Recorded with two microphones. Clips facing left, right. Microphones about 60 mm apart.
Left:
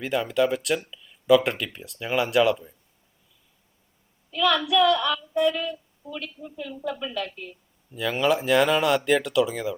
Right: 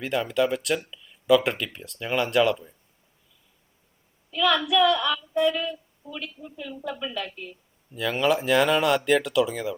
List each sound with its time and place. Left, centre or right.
0.0 s speech: centre
4.3 s a woman's voice: centre